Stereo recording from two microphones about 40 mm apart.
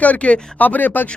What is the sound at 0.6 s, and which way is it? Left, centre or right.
Speech, left.